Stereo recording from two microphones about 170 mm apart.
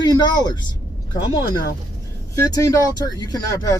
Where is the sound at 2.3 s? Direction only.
20° left (ahead or behind).